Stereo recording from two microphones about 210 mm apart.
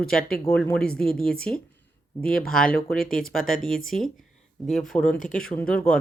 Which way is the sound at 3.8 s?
Centre (ahead or behind).